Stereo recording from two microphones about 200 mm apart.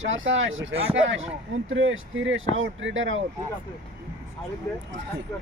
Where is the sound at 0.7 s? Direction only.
30° right (ahead or behind).